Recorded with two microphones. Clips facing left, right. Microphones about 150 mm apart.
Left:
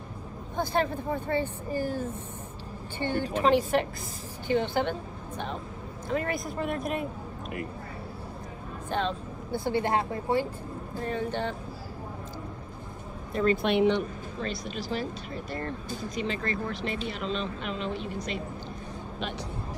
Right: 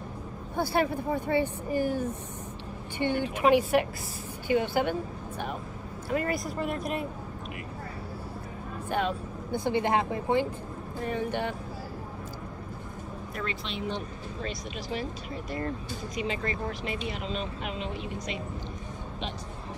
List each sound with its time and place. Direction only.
0.6 s speech: 10° right (ahead or behind)
6.0 s speech: 5° right (ahead or behind)
8.9 s speech: 15° right (ahead or behind)
13.5 s speech: 55° left (ahead or behind)